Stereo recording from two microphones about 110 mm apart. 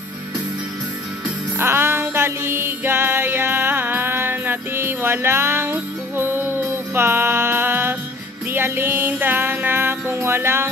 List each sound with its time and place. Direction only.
1.6 s music: 20° right (ahead or behind)